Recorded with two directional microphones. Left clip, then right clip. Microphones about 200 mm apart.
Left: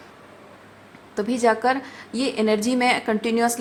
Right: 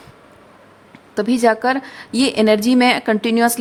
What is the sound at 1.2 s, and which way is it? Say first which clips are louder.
A woman's voice: right 5 dB; 30° right (ahead or behind).